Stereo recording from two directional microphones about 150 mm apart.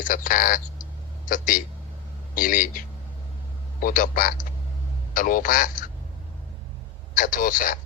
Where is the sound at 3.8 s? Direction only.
65° left (ahead or behind).